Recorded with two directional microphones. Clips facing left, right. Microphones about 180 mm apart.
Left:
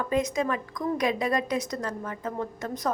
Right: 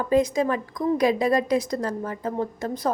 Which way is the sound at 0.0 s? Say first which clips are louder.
Right 5 dB; 30° right (ahead or behind).